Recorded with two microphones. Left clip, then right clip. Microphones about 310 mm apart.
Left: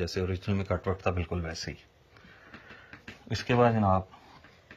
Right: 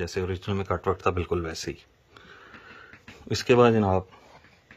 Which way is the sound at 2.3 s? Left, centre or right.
Centre.